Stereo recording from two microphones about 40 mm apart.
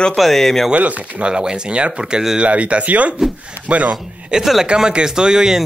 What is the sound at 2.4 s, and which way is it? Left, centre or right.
Speech, right.